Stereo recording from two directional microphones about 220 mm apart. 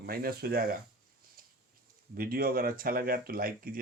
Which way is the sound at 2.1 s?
40° right (ahead or behind).